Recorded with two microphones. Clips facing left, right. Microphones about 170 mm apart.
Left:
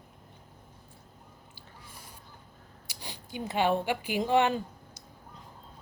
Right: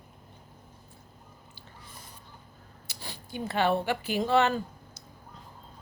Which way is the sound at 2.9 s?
15° left (ahead or behind).